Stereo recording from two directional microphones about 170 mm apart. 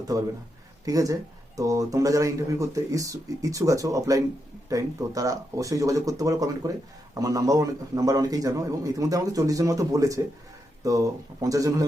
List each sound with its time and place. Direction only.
0.1 s speech: 20° right (ahead or behind)